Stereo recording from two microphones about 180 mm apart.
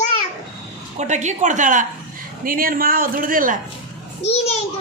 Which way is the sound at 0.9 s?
40° right (ahead or behind).